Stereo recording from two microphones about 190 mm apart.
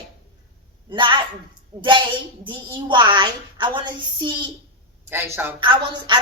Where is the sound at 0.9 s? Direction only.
25° right (ahead or behind).